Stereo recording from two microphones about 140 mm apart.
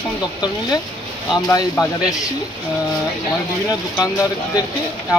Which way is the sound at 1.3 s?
25° left (ahead or behind).